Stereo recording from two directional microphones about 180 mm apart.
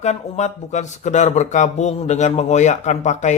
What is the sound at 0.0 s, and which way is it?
Speech, 40° left (ahead or behind).